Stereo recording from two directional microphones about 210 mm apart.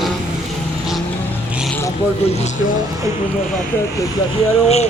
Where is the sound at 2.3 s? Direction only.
30° left (ahead or behind).